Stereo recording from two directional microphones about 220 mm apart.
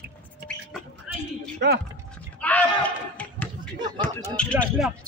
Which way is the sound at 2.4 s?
5° left (ahead or behind).